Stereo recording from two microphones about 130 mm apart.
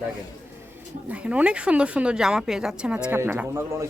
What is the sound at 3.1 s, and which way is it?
Speech, 20° right (ahead or behind).